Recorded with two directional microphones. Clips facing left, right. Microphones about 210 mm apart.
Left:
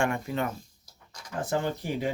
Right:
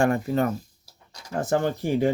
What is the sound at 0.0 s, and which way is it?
Speech, 40° right (ahead or behind).